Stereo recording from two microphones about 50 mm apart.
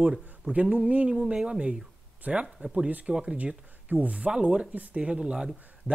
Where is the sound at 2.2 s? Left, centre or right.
Right.